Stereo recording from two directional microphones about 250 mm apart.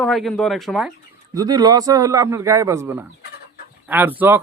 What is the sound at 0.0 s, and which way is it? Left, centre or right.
Speech, centre.